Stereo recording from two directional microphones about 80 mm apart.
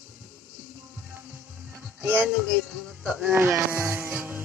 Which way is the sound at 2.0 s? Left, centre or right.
Centre.